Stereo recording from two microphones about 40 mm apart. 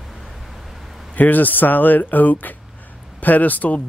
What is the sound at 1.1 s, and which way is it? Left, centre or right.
Speech, left.